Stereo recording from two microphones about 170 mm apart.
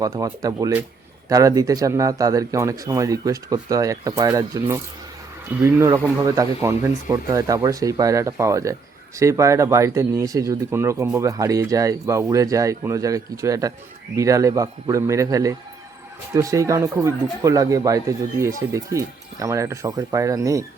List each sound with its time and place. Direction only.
0.0 s speech: 20° right (ahead or behind)